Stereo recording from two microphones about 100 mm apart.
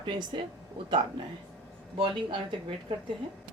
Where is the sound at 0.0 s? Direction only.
50° right (ahead or behind).